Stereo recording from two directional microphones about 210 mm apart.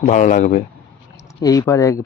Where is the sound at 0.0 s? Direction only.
35° left (ahead or behind).